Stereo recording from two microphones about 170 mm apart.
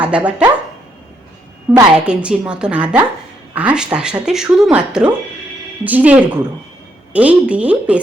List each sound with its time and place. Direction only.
0.0 s speech: 5° right (ahead or behind)
1.7 s speech: centre (ahead or behind)